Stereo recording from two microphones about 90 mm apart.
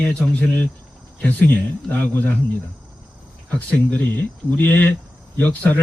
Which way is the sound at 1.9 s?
20° left (ahead or behind).